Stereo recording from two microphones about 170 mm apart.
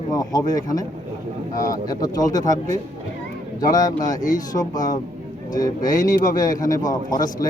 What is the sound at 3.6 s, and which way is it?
A man's voice, 20° left (ahead or behind).